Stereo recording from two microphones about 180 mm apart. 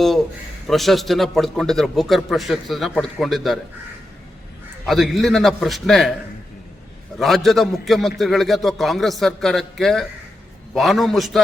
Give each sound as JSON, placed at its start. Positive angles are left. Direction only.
{"t": 0.7, "sound": "a man's voice", "side_deg": 0}
{"t": 4.9, "sound": "a man's voice", "side_deg": 0}
{"t": 7.2, "sound": "a man's voice", "side_deg": 0}